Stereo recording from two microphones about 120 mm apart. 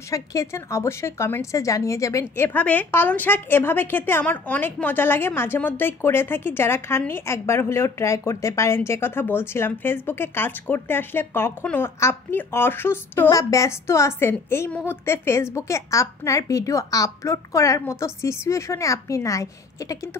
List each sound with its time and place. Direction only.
0.1 s a woman's voice: 25° left (ahead or behind)